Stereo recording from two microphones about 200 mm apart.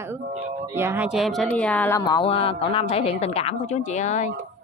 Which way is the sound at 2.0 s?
25° left (ahead or behind).